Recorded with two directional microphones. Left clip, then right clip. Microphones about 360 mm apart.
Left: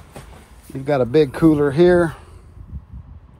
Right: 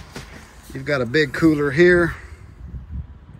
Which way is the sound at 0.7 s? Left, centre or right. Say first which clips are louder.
Left 3 dB; centre.